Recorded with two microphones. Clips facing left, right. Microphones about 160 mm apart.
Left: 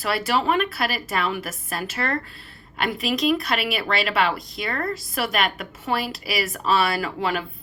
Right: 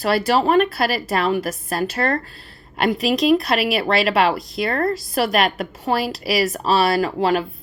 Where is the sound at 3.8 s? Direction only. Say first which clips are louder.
Right 5 dB; 35° right (ahead or behind).